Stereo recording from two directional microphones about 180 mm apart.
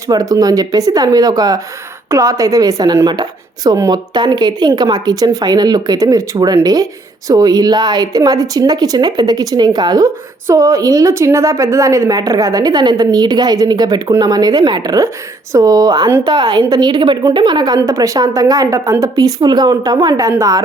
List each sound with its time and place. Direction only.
0.1 s a woman's voice: 20° right (ahead or behind)